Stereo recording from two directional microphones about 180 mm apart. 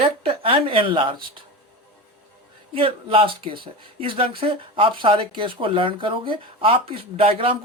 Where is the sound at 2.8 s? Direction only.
30° right (ahead or behind).